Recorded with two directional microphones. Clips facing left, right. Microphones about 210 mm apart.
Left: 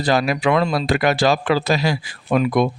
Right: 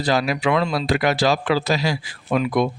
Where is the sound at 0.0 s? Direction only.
55° left (ahead or behind).